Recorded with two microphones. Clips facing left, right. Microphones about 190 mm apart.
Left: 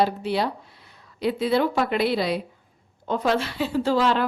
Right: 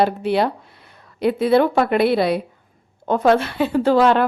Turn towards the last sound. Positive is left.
turn(degrees=-60)  # may be behind; listen again after turning